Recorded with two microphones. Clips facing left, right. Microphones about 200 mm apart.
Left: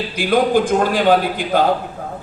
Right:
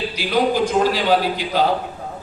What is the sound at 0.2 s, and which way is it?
A man's voice, 50° left (ahead or behind).